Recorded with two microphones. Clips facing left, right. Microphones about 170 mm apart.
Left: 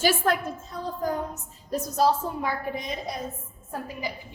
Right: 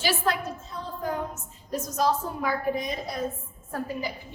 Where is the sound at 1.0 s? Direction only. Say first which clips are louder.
Left 1 dB; 40° left (ahead or behind).